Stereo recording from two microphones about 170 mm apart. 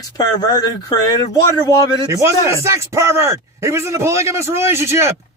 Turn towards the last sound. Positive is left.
turn(degrees=-15)  # may be behind; listen again after turning